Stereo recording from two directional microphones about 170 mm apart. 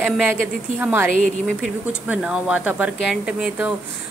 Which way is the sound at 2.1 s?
5° right (ahead or behind).